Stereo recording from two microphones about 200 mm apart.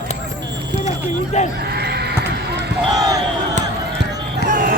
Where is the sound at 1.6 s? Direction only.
55° right (ahead or behind).